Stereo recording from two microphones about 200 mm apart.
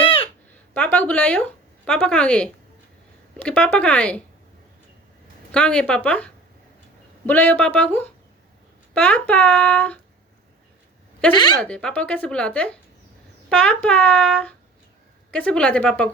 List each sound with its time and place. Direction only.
0.0 s a sound: 30° left (ahead or behind)
0.7 s speech: 5° left (ahead or behind)
5.5 s speech: 5° left (ahead or behind)
8.9 s speech: 5° left (ahead or behind)
11.6 s speech: 5° left (ahead or behind)